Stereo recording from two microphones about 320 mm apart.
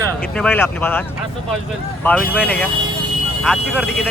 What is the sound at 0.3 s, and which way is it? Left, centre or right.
Speech, centre.